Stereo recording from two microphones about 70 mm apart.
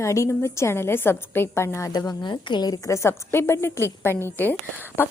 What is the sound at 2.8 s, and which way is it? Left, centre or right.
A woman's voice, left.